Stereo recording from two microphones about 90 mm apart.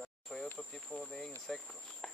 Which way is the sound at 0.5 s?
10° left (ahead or behind).